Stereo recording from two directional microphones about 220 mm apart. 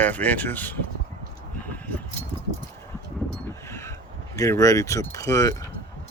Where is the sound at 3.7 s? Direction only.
15° left (ahead or behind).